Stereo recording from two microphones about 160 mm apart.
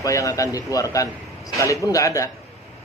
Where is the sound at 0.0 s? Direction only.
20° left (ahead or behind).